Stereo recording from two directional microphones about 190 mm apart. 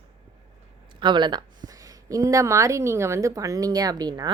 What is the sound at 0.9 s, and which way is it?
Speech, 25° right (ahead or behind).